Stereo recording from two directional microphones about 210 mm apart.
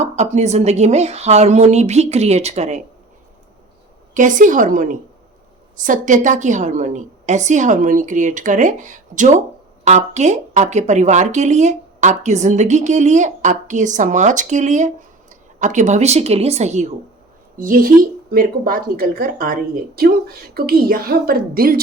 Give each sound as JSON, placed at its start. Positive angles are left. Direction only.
{"t": 0.0, "sound": "speech", "side_deg": -30}
{"t": 4.1, "sound": "a woman's voice", "side_deg": -40}